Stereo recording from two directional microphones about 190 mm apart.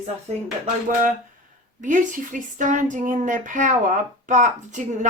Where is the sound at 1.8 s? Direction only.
40° right (ahead or behind).